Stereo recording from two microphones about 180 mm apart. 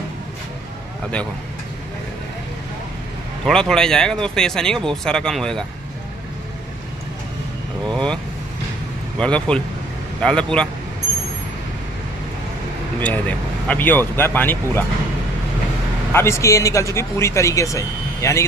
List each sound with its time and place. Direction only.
3.4 s speech: 5° left (ahead or behind)
7.9 s speech: 5° left (ahead or behind)
9.2 s speech: 5° left (ahead or behind)
13.0 s speech: 10° left (ahead or behind)
16.1 s speech: 15° left (ahead or behind)